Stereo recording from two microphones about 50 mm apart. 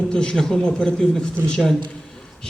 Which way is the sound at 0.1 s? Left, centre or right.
Centre.